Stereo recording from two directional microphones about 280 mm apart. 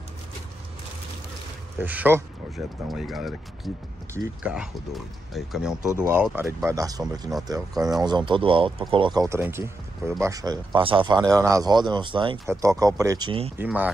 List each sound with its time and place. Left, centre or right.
1.8 s speech: centre
13.6 s speech: centre